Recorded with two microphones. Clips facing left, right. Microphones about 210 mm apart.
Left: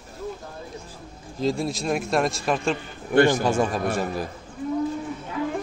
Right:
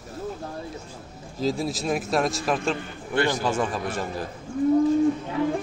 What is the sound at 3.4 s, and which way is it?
Speech, 10° left (ahead or behind).